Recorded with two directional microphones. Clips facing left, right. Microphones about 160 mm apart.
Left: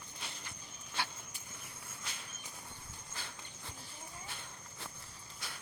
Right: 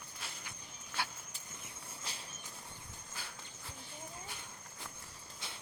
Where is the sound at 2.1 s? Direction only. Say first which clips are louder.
Right 1 dB; 35° right (ahead or behind).